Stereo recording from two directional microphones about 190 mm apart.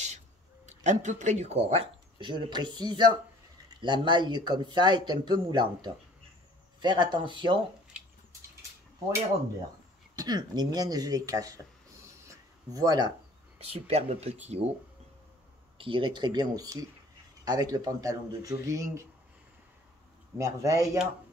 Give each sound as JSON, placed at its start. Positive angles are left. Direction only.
{"t": 0.7, "sound": "speech", "side_deg": -40}
{"t": 10.1, "sound": "speech", "side_deg": -20}
{"t": 12.3, "sound": "a sound", "side_deg": -20}
{"t": 13.6, "sound": "speech", "side_deg": -30}
{"t": 15.8, "sound": "speech", "side_deg": -25}
{"t": 20.3, "sound": "speech", "side_deg": -15}